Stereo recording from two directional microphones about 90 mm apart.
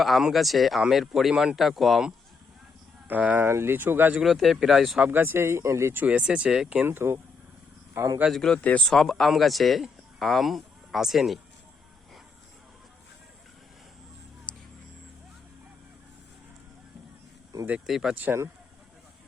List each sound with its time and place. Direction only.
0.0 s speech: 5° right (ahead or behind)
3.1 s speech: 20° right (ahead or behind)
4.2 s speech: centre (ahead or behind)
5.0 s speech: 25° right (ahead or behind)
6.8 s speech: 25° right (ahead or behind)
8.3 s speech: 5° left (ahead or behind)
14.5 s vehicle: 15° left (ahead or behind)
17.7 s speech: 5° right (ahead or behind)
18.1 s speech: 20° right (ahead or behind)